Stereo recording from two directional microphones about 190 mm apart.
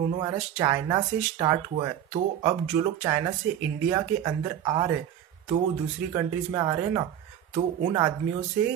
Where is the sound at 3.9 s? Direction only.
20° right (ahead or behind).